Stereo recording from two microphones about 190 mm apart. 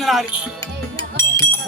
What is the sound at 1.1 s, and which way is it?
Music, 15° left (ahead or behind).